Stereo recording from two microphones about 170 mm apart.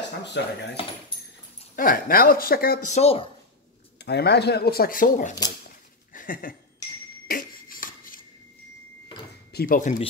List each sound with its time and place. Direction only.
0.4 s speech: 90° left
1.8 s speech: 55° left (ahead or behind)
2.9 s a woman's voice: 35° left (ahead or behind)
4.0 s speech: 75° left (ahead or behind); by 5.3 s 55° left (ahead or behind)
6.1 s a sound: 55° left (ahead or behind)
9.5 s speech: 60° left (ahead or behind)